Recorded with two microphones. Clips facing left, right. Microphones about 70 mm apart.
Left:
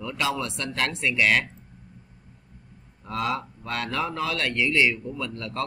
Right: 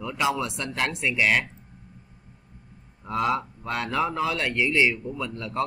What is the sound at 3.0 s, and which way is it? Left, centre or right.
A man's voice, centre.